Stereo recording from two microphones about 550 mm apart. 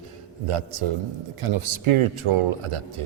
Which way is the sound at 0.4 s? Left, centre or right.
Right.